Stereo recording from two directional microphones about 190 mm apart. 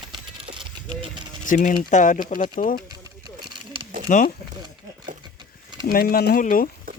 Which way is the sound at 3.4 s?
25° right (ahead or behind).